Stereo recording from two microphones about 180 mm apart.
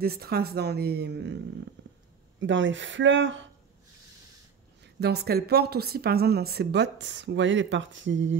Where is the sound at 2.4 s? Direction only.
90° right.